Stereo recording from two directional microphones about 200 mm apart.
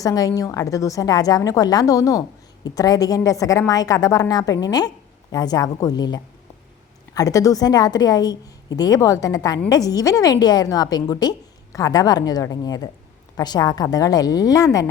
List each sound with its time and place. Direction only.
0.0 s a woman's voice: 15° left (ahead or behind)